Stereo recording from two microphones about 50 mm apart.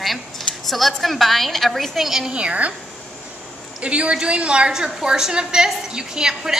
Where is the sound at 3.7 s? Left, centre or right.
Right.